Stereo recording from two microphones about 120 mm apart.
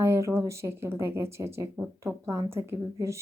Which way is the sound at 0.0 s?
25° right (ahead or behind).